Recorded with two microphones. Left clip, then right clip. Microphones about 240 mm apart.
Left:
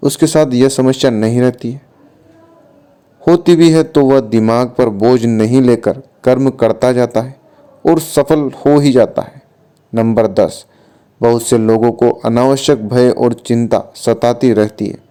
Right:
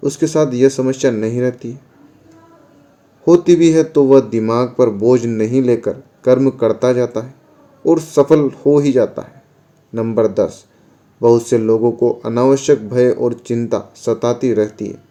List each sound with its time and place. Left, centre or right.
0.0 s speech: left
3.2 s speech: left